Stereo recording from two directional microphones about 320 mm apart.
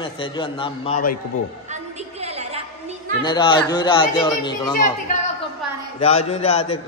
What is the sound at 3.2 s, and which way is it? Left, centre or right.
A man's voice, centre.